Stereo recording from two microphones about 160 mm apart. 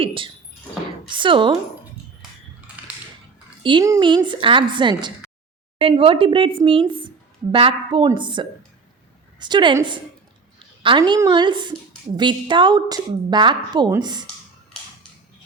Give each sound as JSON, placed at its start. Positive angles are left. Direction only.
{"t": 0.0, "sound": "a sound", "side_deg": -35}
{"t": 1.1, "sound": "speech", "side_deg": -30}
{"t": 3.6, "sound": "a woman's voice", "side_deg": -30}
{"t": 10.8, "sound": "a woman's voice", "side_deg": -30}